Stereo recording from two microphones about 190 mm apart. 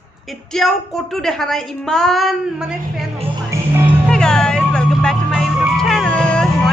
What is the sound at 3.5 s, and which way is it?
Music, 15° right (ahead or behind).